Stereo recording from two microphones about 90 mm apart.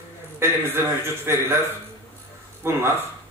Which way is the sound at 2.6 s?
30° right (ahead or behind).